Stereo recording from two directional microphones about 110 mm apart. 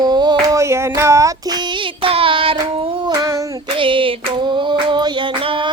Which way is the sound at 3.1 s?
30° right (ahead or behind).